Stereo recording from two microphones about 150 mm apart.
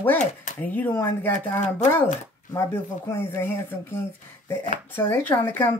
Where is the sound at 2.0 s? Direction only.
50° left (ahead or behind).